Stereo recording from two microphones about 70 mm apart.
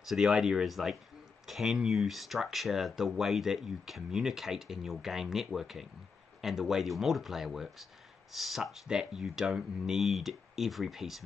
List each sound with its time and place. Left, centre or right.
0.1 s speech: centre